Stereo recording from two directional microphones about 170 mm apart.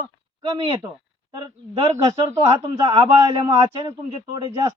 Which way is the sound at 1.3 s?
25° right (ahead or behind).